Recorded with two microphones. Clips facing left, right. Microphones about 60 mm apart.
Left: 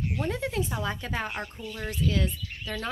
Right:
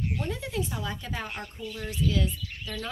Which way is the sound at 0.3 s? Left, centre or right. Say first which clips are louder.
Left 2 dB; left.